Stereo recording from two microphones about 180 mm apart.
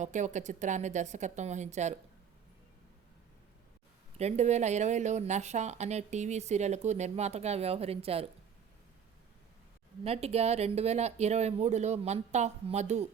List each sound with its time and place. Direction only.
0.0 s speech: 40° right (ahead or behind)
4.2 s speech: 35° right (ahead or behind)
10.0 s speech: 35° right (ahead or behind)